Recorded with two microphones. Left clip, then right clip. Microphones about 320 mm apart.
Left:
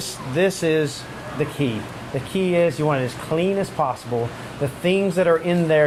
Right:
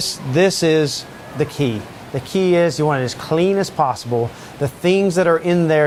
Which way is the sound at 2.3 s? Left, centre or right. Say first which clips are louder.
Right 4 dB; right.